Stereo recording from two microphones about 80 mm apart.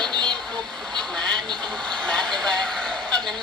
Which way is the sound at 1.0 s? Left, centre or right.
Centre.